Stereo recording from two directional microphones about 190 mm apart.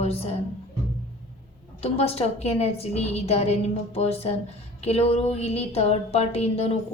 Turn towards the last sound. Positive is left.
turn(degrees=30)  # may be behind; listen again after turning